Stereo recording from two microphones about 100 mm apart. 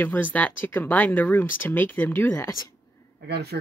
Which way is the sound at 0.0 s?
20° left (ahead or behind).